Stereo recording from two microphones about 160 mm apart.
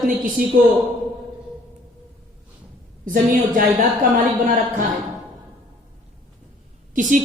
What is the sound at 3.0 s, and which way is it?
Speech, 60° right (ahead or behind).